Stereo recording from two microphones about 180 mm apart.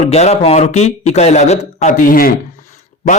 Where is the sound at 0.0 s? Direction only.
35° left (ahead or behind); by 2.3 s 50° left (ahead or behind).